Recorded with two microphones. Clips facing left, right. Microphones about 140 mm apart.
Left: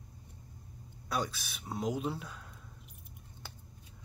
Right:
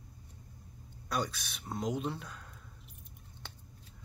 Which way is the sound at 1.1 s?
Centre (ahead or behind).